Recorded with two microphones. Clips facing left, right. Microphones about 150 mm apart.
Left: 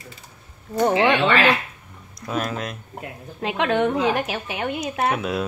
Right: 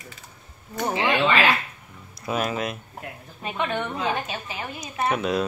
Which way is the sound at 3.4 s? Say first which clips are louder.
Left 7 dB; 90° left.